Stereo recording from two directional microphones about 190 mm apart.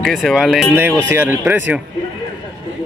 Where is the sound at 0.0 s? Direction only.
Centre (ahead or behind).